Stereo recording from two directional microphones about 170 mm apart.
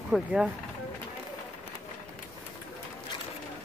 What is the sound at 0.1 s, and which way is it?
Speech, 5° right (ahead or behind).